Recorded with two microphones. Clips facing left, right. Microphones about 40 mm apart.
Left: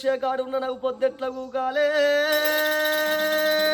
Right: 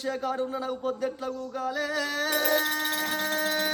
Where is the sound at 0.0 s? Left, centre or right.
Left.